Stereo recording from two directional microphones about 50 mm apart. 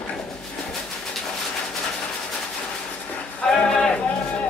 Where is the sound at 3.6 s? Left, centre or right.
Centre.